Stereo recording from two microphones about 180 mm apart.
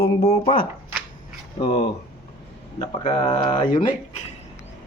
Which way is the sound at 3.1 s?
30° left (ahead or behind).